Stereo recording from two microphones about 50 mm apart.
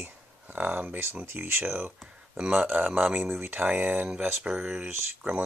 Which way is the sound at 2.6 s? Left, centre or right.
Right.